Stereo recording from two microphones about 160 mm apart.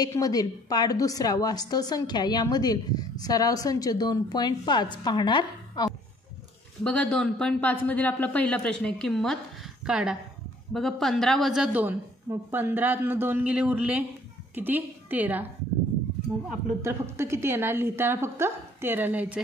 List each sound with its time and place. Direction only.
0.0 s a woman's voice: 25° left (ahead or behind)
6.8 s a woman's voice: 5° left (ahead or behind); by 15.4 s 10° right (ahead or behind)
16.8 s a woman's voice: 15° right (ahead or behind)